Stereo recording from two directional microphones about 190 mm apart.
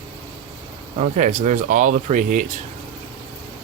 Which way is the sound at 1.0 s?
40° right (ahead or behind).